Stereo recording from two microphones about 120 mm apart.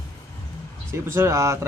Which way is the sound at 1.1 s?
25° right (ahead or behind).